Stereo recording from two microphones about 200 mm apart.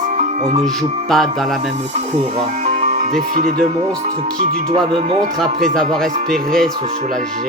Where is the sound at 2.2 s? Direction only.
30° right (ahead or behind).